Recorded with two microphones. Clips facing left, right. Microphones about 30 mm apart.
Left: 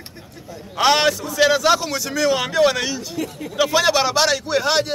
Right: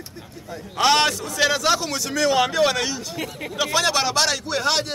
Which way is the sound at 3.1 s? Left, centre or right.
Right.